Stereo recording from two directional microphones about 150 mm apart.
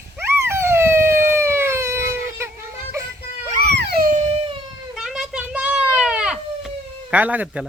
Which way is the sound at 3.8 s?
80° right.